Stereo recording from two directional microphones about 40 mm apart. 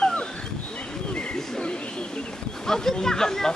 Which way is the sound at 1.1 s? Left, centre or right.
Left.